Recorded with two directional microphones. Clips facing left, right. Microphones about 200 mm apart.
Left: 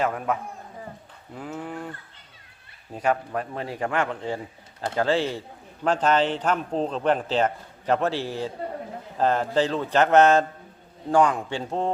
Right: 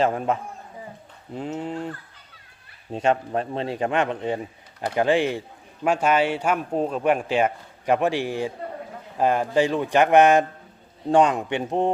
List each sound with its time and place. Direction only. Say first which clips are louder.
0.0 s speech: right 3 dB; 25° right (ahead or behind)
2.9 s speech: right 3 dB; 25° right (ahead or behind)